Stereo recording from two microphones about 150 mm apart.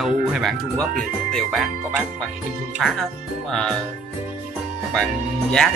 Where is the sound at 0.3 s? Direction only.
Centre (ahead or behind).